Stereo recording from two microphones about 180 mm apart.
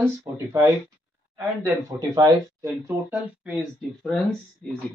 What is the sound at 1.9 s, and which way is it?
Speech, 20° right (ahead or behind).